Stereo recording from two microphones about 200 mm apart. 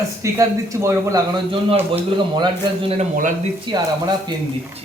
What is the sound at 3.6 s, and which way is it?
Speech, 20° right (ahead or behind).